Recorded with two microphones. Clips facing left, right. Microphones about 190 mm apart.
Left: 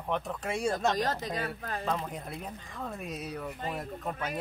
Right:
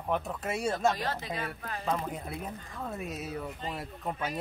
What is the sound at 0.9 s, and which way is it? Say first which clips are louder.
Speech: left 3 dB; 40° left (ahead or behind).